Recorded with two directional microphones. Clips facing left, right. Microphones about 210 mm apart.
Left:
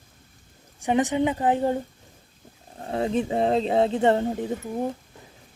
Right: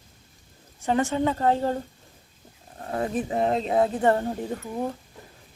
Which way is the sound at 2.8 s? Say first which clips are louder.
Left 3 dB; 25° left (ahead or behind).